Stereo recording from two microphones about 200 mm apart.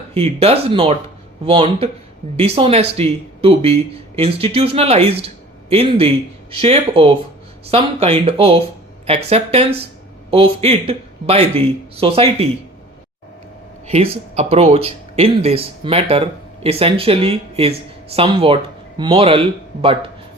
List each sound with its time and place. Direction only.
0.1 s speech: 30° right (ahead or behind)
13.8 s speech: 30° right (ahead or behind)